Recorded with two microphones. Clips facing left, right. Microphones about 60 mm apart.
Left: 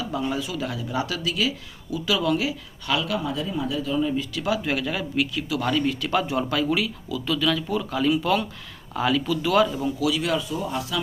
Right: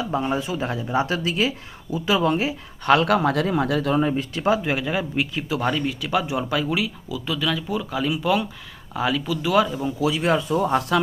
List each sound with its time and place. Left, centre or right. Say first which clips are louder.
0.0 s speech: right 3 dB; right
2.9 s speech: right 8 dB; right
3.2 s speech: right 7 dB; right
4.4 s speech: right 6 dB; right
4.6 s speech: right 2 dB; centre
10.0 s speech: right 4 dB; right
10.5 s speech: right 7 dB; right